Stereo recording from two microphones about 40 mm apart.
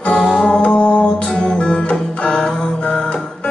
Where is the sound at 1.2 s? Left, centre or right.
Centre.